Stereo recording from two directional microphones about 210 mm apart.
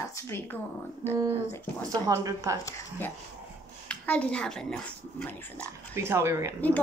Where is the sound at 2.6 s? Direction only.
15° left (ahead or behind).